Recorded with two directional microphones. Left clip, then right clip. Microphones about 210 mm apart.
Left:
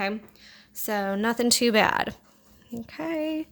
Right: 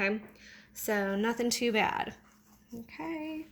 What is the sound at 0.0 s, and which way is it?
A woman's voice, 25° left (ahead or behind).